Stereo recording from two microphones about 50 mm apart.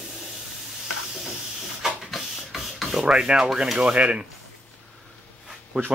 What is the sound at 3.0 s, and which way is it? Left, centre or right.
Rub, centre.